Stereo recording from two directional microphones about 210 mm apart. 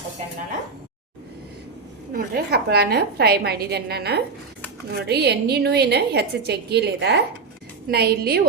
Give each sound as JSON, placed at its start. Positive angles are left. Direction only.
{"t": 2.1, "sound": "a woman's voice", "side_deg": -50}